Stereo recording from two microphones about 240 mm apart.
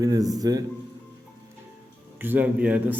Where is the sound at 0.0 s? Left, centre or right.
Centre.